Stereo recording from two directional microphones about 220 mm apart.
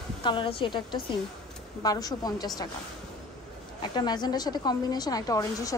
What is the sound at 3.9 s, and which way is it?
A woman's voice, 20° left (ahead or behind).